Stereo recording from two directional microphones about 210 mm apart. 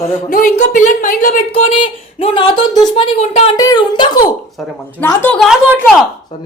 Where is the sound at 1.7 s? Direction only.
25° left (ahead or behind).